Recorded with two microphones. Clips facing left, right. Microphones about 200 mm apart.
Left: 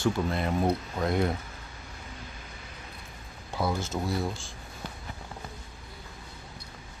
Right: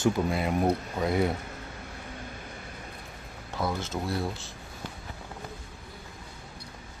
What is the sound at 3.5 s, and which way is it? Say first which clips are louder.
Speech: left 1 dB; 10° left (ahead or behind).